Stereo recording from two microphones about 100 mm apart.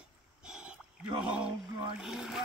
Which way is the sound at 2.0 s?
5° right (ahead or behind).